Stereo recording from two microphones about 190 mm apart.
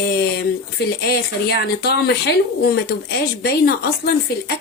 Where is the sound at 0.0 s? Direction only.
55° left (ahead or behind).